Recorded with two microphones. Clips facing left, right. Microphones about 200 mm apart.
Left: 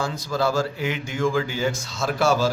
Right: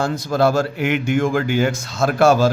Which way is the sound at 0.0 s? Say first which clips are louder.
Right 6 dB; 65° right (ahead or behind).